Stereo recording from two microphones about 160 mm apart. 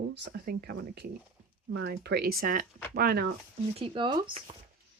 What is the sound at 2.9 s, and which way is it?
Speech, 75° right (ahead or behind).